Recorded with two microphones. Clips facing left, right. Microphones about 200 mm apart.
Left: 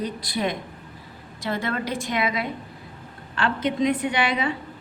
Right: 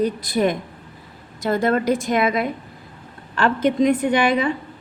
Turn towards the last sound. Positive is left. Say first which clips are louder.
# right 6 dB
turn(degrees=-50)  # may be behind; listen again after turning